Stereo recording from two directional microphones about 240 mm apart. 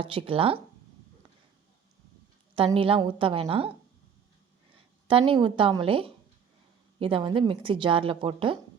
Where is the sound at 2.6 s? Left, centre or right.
Right.